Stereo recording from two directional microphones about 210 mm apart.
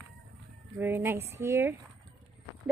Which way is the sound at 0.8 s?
10° right (ahead or behind).